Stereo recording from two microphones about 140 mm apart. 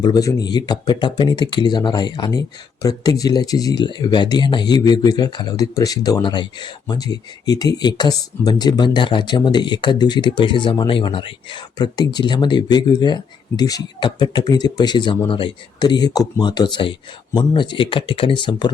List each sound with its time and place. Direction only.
0.0 s speech: 25° left (ahead or behind)